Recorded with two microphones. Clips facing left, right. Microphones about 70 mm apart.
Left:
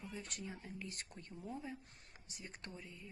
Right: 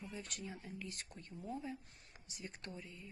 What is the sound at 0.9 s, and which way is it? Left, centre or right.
Speech, left.